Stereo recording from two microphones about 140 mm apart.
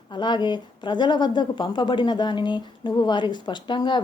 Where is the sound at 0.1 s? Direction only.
35° left (ahead or behind).